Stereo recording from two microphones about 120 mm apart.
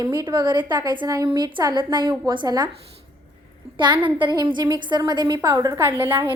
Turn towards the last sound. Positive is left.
turn(degrees=-20)  # may be behind; listen again after turning